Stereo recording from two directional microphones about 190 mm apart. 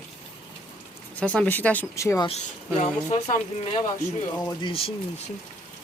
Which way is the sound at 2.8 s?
35° left (ahead or behind).